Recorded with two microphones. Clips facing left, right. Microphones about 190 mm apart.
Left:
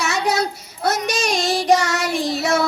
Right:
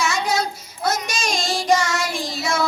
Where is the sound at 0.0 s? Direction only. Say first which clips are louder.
Left 2 dB; 65° left (ahead or behind).